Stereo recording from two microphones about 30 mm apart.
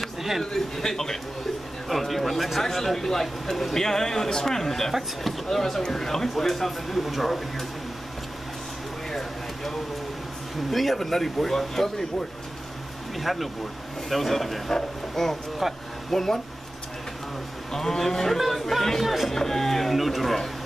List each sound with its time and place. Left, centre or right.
0.0 s a sound: centre
0.4 s speech: centre
1.9 s a sound: centre
2.6 s speech: centre
10.7 s speech: centre
13.2 s speech: centre
15.6 s speech: centre
16.1 s speech: centre
17.7 s speech: centre
19.3 s music: centre
19.9 s speech: centre